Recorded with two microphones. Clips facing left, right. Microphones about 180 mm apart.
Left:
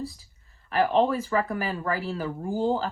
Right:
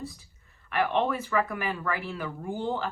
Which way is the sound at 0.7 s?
35° left (ahead or behind).